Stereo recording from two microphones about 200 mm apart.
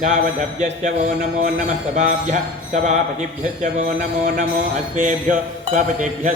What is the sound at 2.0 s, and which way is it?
Mantra, 35° right (ahead or behind).